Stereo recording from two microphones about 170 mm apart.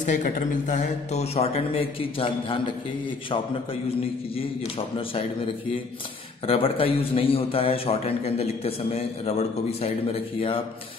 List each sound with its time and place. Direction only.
0.0 s a man's voice: 45° left (ahead or behind); by 2.7 s 30° left (ahead or behind)
6.4 s a man's voice: 35° left (ahead or behind)